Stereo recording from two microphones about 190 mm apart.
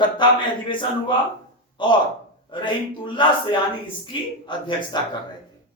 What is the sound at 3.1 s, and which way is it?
A man's voice, 25° left (ahead or behind).